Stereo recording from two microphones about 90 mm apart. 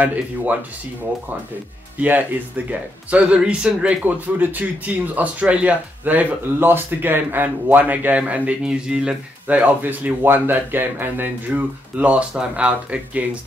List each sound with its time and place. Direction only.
0.0 s speech: 15° right (ahead or behind)
2.0 s speech: 20° right (ahead or behind)